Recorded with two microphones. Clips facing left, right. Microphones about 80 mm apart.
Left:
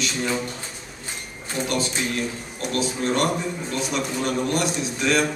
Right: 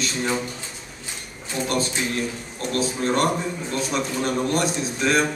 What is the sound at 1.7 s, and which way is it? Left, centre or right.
A man's voice, right.